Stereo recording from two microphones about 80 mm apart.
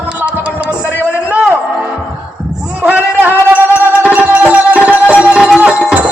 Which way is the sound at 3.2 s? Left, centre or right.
Right.